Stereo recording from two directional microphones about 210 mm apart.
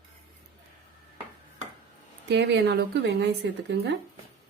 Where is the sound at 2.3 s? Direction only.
55° right (ahead or behind).